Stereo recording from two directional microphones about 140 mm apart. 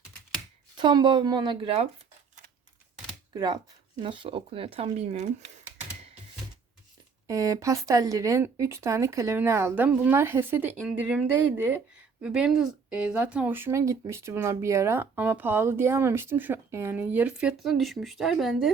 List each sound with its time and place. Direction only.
0.8 s speech: 35° right (ahead or behind)
3.3 s speech: 30° right (ahead or behind); by 5.3 s 50° right (ahead or behind)
7.3 s speech: 25° right (ahead or behind); by 18.7 s centre (ahead or behind)